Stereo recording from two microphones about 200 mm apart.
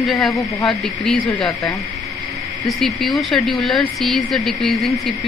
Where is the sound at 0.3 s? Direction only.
15° left (ahead or behind).